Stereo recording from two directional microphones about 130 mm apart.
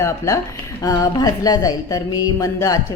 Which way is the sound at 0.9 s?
30° left (ahead or behind).